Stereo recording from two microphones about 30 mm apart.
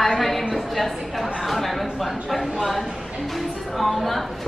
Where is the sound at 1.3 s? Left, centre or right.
Centre.